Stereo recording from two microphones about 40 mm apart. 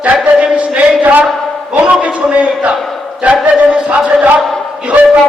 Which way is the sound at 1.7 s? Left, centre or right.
Right.